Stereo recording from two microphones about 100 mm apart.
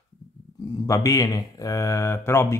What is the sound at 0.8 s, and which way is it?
A man's voice, 35° left (ahead or behind).